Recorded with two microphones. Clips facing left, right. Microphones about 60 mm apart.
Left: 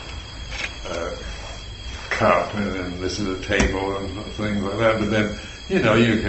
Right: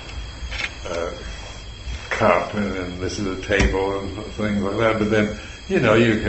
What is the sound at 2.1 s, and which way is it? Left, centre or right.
A man's voice, centre.